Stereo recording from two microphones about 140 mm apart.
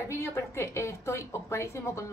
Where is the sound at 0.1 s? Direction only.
20° left (ahead or behind).